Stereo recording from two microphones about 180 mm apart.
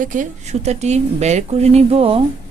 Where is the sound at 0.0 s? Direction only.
45° right (ahead or behind).